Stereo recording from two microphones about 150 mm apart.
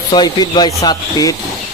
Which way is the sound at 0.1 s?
30° left (ahead or behind).